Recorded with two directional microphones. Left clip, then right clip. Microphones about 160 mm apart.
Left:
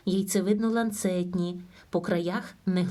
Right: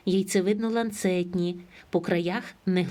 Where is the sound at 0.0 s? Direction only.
35° right (ahead or behind).